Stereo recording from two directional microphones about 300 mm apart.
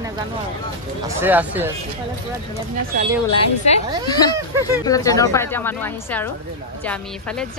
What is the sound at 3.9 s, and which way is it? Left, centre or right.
Speech, centre.